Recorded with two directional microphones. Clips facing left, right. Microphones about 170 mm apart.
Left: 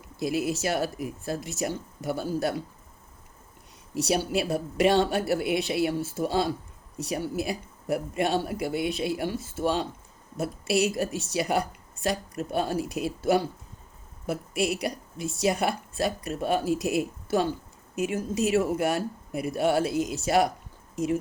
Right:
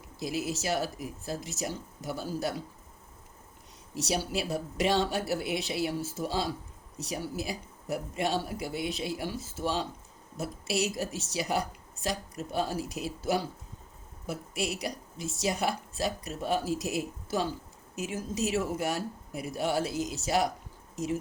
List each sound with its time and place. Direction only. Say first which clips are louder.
0.2 s speech: left 6 dB; 60° left (ahead or behind)
3.9 s speech: left 5 dB; 60° left (ahead or behind)